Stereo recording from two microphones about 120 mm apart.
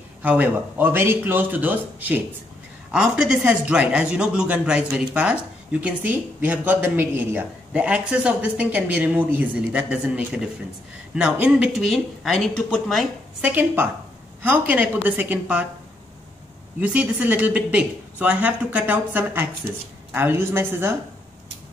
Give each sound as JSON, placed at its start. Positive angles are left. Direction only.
{"t": 0.2, "sound": "speech", "side_deg": -15}
{"t": 13.4, "sound": "speech", "side_deg": -15}
{"t": 16.8, "sound": "a woman's voice", "side_deg": -10}